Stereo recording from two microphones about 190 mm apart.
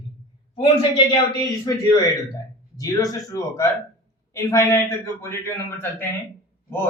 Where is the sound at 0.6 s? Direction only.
30° left (ahead or behind).